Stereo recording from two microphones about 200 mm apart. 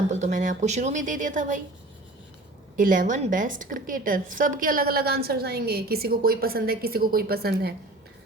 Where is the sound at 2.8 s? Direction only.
40° right (ahead or behind).